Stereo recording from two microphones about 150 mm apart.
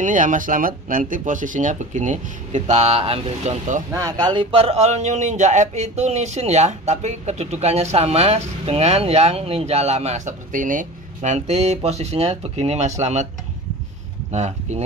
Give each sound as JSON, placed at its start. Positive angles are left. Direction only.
{"t": 0.0, "sound": "speech", "side_deg": -60}
{"t": 2.7, "sound": "speech", "side_deg": -40}
{"t": 3.9, "sound": "speech", "side_deg": -25}
{"t": 14.3, "sound": "speech", "side_deg": -50}